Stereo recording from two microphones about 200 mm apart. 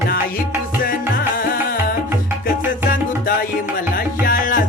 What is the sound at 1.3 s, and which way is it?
Music, 45° left (ahead or behind).